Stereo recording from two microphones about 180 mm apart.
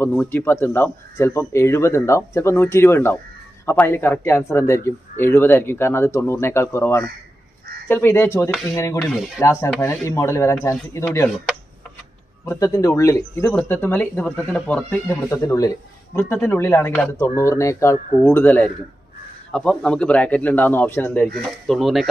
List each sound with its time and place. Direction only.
0.1 s speech: 10° left (ahead or behind)
9.0 s speech: centre (ahead or behind)
9.4 s speech: 15° left (ahead or behind)
11.2 s speech: centre (ahead or behind)
12.4 s speech: 15° left (ahead or behind); by 22.0 s centre (ahead or behind)